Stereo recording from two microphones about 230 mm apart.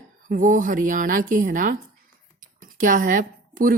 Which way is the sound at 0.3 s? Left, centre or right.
Right.